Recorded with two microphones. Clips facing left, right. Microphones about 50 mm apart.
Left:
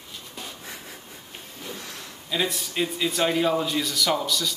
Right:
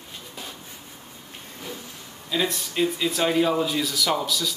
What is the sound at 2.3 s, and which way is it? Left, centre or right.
A man's voice, centre.